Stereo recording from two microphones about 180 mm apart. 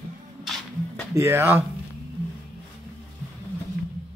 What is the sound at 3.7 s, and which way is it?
Music, 60° right (ahead or behind).